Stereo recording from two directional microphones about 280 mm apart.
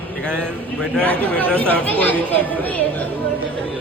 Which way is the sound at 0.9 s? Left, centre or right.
Centre.